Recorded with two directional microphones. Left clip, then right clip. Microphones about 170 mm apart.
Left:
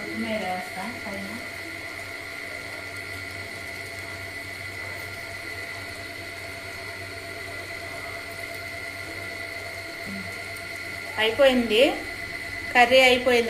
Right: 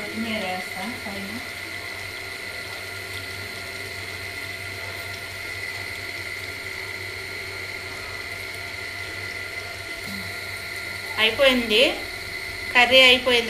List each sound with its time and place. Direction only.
11.1 s speech: 35° left (ahead or behind)